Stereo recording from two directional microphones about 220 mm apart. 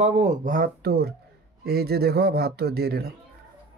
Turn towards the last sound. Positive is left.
turn(degrees=-45)  # may be behind; listen again after turning